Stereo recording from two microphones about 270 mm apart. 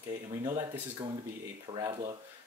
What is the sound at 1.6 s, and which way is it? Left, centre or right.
Speech, centre.